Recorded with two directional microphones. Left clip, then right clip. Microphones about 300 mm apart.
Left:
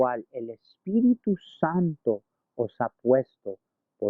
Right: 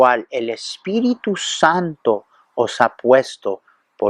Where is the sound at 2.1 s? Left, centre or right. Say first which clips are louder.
Right 12 dB; right.